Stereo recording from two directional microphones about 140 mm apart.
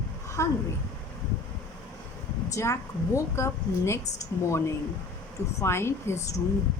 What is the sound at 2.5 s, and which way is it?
A woman's voice, 20° left (ahead or behind).